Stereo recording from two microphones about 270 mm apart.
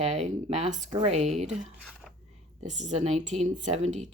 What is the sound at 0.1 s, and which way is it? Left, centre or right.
Speech, right.